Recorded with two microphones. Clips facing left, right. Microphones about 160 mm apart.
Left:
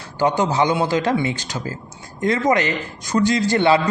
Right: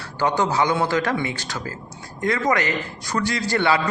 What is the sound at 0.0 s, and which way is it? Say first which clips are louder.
A man's voice: left 3 dB; 15° left (ahead or behind).